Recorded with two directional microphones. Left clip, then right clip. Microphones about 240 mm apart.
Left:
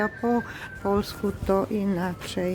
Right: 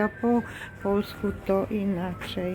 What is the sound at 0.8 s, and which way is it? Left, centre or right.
Speech, centre.